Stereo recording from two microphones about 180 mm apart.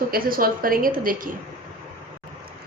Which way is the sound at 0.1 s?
55° right (ahead or behind).